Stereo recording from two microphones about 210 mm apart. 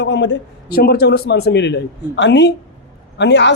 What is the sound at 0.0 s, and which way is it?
Speech, 60° left (ahead or behind).